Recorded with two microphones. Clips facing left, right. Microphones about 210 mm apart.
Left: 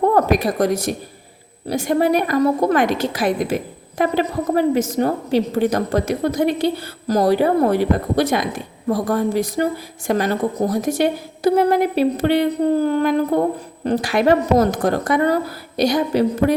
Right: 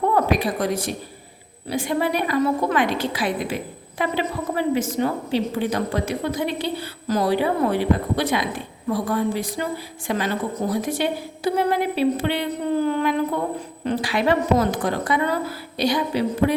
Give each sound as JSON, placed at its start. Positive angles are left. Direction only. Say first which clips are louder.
{"t": 0.1, "sound": "a woman's voice", "louder": "left 4 dB", "side_deg": 45}